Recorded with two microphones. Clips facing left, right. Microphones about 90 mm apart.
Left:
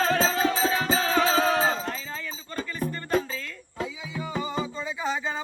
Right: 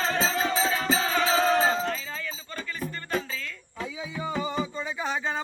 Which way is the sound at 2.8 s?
35° left (ahead or behind).